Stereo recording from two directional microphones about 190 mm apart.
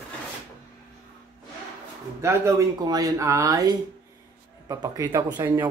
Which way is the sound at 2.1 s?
15° right (ahead or behind).